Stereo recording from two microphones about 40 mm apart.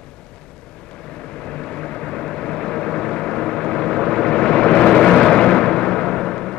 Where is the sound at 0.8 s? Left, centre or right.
Centre.